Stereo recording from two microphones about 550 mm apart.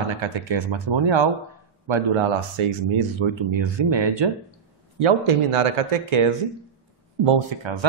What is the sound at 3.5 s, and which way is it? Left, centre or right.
Speech, right.